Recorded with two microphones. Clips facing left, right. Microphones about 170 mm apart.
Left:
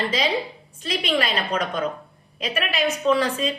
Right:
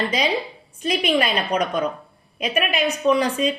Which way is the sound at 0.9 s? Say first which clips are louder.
Right 3 dB; 20° right (ahead or behind).